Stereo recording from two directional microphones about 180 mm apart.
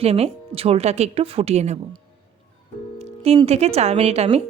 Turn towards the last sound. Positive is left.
turn(degrees=-35)  # may be behind; listen again after turning